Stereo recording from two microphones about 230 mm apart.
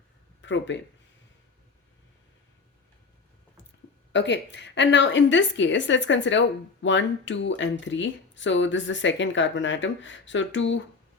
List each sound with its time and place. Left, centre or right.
0.4 s a woman's voice: left
4.1 s a woman's voice: left